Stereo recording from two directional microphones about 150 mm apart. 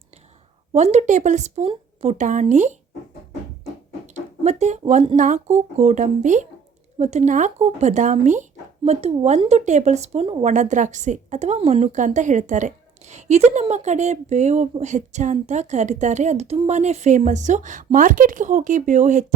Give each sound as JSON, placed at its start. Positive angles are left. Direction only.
{"t": 0.7, "sound": "a woman's voice", "side_deg": -50}
{"t": 3.6, "sound": "a sound", "side_deg": -50}
{"t": 5.1, "sound": "a woman's voice", "side_deg": -55}
{"t": 10.5, "sound": "a woman's voice", "side_deg": -55}